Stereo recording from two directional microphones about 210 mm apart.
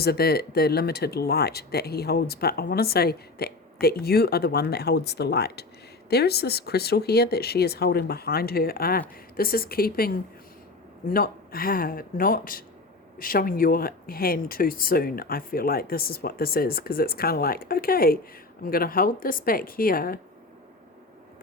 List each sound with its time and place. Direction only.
0.0 s speech: 50° left (ahead or behind)